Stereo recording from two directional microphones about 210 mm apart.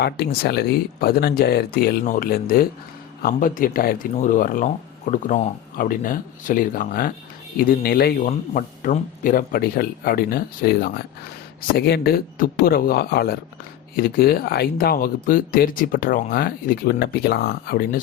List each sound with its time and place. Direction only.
0.0 s speech: 50° left (ahead or behind)